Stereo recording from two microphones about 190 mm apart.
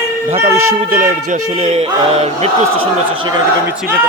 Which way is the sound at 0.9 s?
45° right (ahead or behind).